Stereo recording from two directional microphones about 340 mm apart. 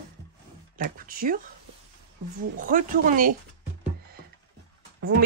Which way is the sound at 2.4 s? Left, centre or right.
Right.